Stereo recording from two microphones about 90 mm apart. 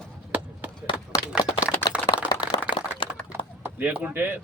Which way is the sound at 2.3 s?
60° left (ahead or behind).